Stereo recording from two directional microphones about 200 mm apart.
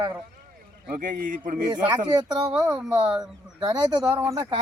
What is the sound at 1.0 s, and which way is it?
Speech, 40° right (ahead or behind).